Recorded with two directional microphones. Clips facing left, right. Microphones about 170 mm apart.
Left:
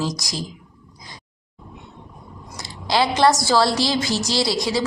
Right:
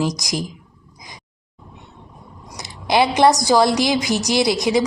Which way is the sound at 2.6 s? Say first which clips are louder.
Right 3 dB; 20° right (ahead or behind).